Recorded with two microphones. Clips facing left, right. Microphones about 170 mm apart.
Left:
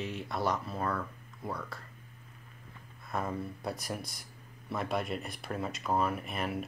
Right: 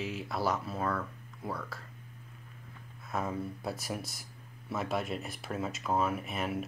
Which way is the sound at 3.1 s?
5° right (ahead or behind).